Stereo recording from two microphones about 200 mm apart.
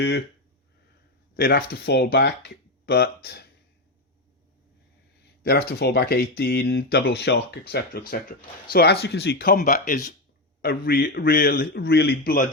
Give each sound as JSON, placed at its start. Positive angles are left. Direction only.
{"t": 1.4, "sound": "speech", "side_deg": 50}
{"t": 5.4, "sound": "speech", "side_deg": 55}
{"t": 10.6, "sound": "speech", "side_deg": 50}